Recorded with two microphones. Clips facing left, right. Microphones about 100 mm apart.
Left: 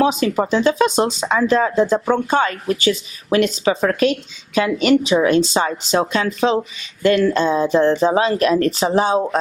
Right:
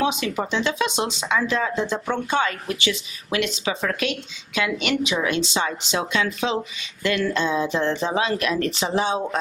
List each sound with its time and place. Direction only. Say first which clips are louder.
0.0 s speech: left 7 dB; 40° left (ahead or behind)